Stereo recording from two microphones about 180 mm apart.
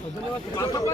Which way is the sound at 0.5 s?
20° left (ahead or behind).